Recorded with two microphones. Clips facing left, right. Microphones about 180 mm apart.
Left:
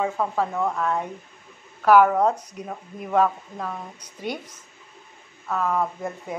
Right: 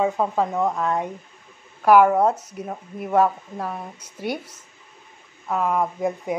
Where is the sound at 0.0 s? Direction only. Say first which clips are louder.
Right 3 dB; 15° right (ahead or behind).